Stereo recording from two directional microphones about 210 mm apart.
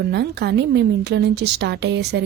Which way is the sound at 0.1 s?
50° right (ahead or behind).